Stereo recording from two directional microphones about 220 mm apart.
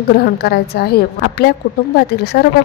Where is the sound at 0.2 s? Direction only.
45° left (ahead or behind).